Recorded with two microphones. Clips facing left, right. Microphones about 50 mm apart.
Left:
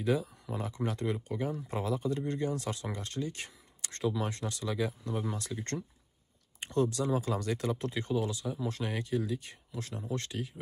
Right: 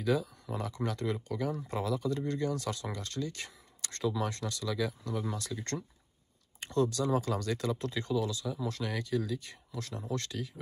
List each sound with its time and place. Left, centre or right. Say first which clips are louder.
0.0 s speech: even; left